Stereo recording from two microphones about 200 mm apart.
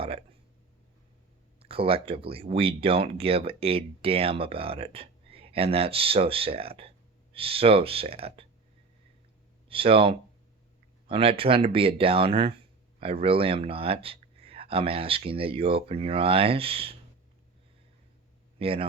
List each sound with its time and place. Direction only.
1.5 s speech: 30° right (ahead or behind)
9.6 s speech: 30° right (ahead or behind)
18.6 s speech: 30° right (ahead or behind)